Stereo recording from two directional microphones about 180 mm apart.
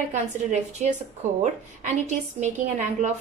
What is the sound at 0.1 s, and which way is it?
A woman's voice, 40° right (ahead or behind).